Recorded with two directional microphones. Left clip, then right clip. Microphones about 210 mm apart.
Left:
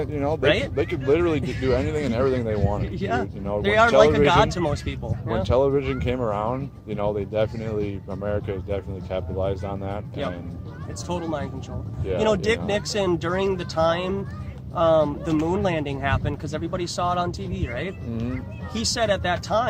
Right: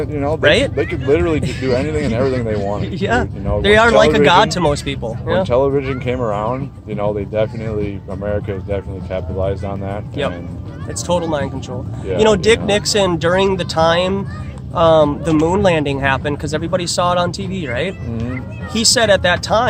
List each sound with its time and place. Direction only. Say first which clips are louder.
0.0 s speech: right 6 dB; 45° left (ahead or behind)
0.4 s speech: right 9 dB; 55° right (ahead or behind)
0.8 s speech: right 5 dB; 45° left (ahead or behind)
2.9 s speech: right 8 dB; 55° right (ahead or behind)
5.4 s speech: right 5 dB; 45° left (ahead or behind)
11.1 s speech: right 11 dB; 55° right (ahead or behind)